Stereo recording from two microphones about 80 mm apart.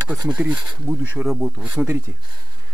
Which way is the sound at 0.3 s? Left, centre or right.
Centre.